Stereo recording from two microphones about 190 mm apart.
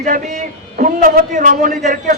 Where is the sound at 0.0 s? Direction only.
45° right (ahead or behind).